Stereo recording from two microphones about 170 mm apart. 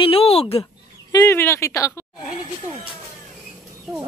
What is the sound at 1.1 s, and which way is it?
Speech, 15° left (ahead or behind).